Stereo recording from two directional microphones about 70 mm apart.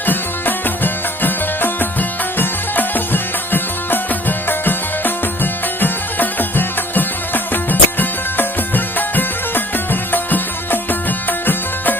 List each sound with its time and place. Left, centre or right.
0.0 s music: left